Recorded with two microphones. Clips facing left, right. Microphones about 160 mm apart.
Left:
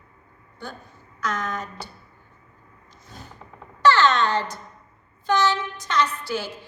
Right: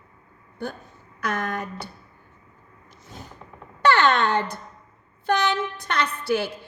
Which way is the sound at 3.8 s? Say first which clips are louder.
Left 1 dB; 55° right (ahead or behind).